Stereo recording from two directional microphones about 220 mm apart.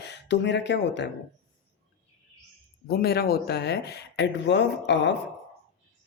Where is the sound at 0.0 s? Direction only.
50° left (ahead or behind).